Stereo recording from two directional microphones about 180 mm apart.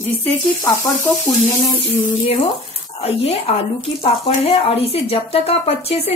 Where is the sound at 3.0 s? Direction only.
35° left (ahead or behind).